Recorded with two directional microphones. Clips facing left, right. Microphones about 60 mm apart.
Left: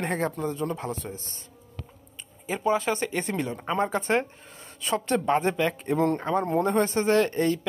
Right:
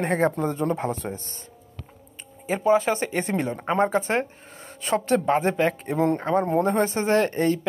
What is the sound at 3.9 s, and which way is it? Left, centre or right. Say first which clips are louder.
Speech: right 2 dB; centre.